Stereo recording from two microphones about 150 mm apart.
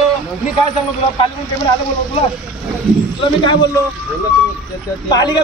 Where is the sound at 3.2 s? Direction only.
30° left (ahead or behind).